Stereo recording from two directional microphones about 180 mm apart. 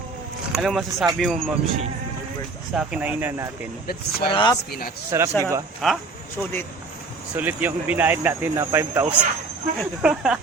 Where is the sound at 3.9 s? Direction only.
55° left (ahead or behind).